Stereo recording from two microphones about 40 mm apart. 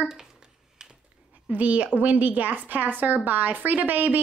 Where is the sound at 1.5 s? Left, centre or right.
Right.